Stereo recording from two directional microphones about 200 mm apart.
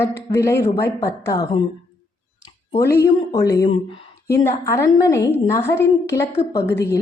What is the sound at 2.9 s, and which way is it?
A woman's voice, 15° left (ahead or behind).